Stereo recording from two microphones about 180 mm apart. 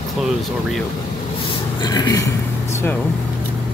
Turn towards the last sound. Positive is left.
turn(degrees=20)  # may be behind; listen again after turning